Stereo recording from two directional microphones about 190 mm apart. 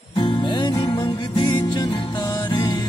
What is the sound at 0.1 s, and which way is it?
Music, 25° left (ahead or behind).